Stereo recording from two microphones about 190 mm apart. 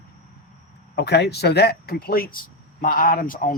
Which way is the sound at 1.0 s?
60° left (ahead or behind).